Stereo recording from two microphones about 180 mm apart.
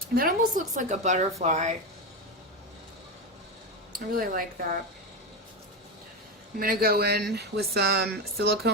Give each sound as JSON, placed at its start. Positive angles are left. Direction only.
{"t": 0.2, "sound": "a woman's voice", "side_deg": -50}
{"t": 3.9, "sound": "speech", "side_deg": -50}
{"t": 6.6, "sound": "speech", "side_deg": -55}